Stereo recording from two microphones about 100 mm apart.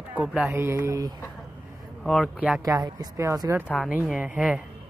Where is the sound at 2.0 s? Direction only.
5° left (ahead or behind).